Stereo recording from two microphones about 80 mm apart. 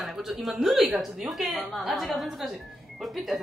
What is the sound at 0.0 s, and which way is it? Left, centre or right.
Speech, centre.